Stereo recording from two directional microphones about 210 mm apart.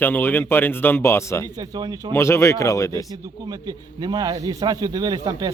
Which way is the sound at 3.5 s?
20° right (ahead or behind).